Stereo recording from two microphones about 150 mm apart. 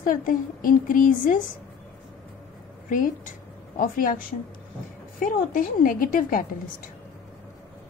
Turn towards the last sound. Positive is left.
turn(degrees=65)  # may be behind; listen again after turning